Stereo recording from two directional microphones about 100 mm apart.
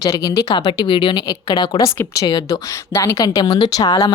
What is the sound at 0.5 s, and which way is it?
A woman's voice, 50° left (ahead or behind).